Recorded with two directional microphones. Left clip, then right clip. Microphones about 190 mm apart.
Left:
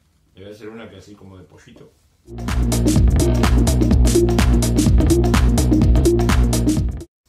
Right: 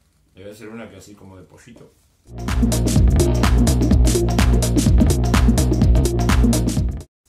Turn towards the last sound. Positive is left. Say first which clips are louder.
# left 3 dB
turn(degrees=0)  # may be behind; listen again after turning